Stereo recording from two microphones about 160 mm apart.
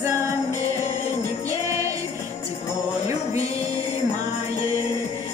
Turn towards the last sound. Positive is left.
turn(degrees=40)  # may be behind; listen again after turning